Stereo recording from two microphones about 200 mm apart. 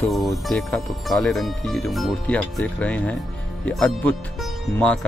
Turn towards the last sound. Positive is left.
turn(degrees=5)  # may be behind; listen again after turning